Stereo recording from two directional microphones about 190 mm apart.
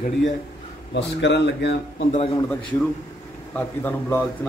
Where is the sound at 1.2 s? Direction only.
65° left (ahead or behind).